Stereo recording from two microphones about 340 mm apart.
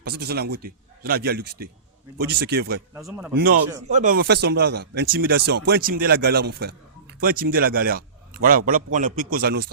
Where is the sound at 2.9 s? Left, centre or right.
Centre.